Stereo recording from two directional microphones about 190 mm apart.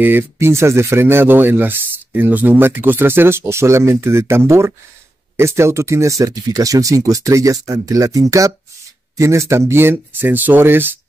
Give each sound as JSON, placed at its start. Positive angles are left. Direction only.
{"t": 0.0, "sound": "speech", "side_deg": -10}